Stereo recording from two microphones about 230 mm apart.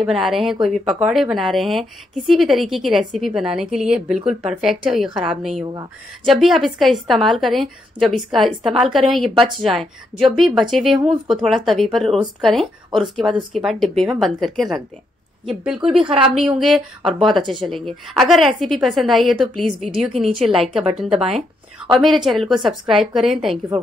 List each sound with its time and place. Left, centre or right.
0.0 s speech: centre
5.6 s speech: centre
6.2 s speech: centre